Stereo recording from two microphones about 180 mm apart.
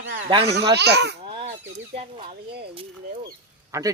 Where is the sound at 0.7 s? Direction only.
70° right (ahead or behind).